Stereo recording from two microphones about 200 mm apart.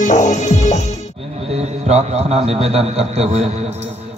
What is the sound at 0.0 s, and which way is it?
Music, 35° left (ahead or behind).